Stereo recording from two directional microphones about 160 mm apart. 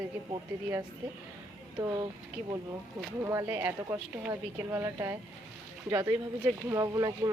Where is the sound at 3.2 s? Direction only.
15° right (ahead or behind).